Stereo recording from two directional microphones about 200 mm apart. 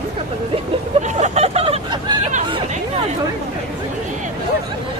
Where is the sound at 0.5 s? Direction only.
35° right (ahead or behind).